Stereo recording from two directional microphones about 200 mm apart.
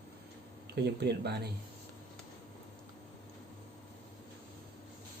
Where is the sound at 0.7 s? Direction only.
55° right (ahead or behind).